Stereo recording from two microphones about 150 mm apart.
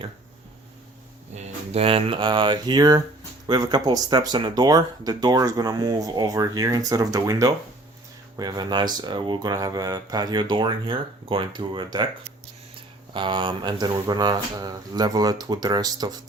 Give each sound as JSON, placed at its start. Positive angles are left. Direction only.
{"t": 1.4, "sound": "speech", "side_deg": -45}
{"t": 13.1, "sound": "speech", "side_deg": -35}